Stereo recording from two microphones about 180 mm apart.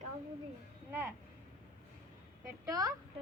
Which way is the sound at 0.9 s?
15° right (ahead or behind).